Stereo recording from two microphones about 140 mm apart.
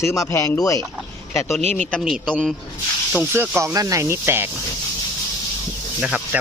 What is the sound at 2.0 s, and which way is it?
Speech, centre (ahead or behind).